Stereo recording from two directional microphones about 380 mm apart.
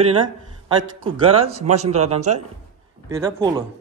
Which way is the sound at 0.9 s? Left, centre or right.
Centre.